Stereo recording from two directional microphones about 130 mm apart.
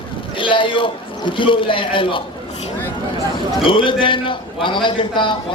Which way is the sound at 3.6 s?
40° left (ahead or behind).